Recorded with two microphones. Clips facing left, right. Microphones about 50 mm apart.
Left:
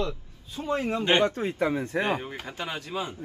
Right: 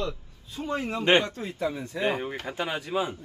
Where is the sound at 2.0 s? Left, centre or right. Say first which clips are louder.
Right 1 dB; centre.